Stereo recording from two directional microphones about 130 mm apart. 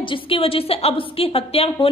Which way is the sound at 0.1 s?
45° left (ahead or behind).